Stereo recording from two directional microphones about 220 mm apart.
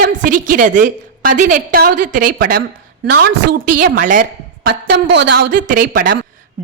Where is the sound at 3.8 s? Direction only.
35° right (ahead or behind).